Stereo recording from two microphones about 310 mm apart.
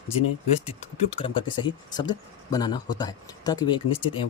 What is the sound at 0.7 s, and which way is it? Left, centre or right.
Speech, centre.